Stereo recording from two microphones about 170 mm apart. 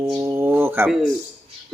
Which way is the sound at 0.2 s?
15° right (ahead or behind).